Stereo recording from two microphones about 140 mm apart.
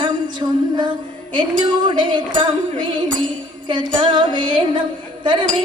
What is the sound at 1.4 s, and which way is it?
Music, 35° right (ahead or behind).